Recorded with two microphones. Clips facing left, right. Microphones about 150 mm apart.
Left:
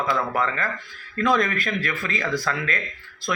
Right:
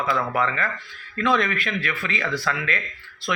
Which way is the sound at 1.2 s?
40° left (ahead or behind).